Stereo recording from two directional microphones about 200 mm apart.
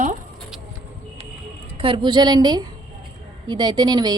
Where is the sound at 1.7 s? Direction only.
25° right (ahead or behind).